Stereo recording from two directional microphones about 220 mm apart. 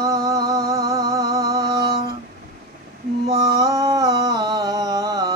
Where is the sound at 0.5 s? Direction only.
15° right (ahead or behind).